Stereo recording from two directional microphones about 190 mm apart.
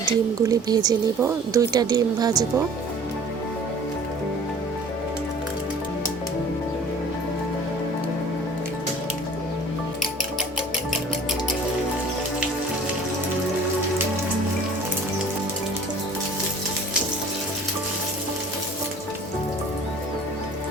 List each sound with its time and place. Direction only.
0.4 s speech: 20° right (ahead or behind)